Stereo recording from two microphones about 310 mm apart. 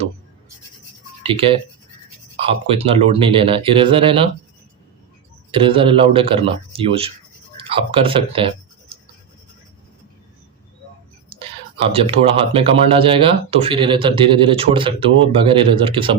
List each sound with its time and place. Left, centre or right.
1.2 s speech: centre
5.5 s speech: centre
7.5 s writing: centre
11.3 s whispering: centre
11.9 s speech: centre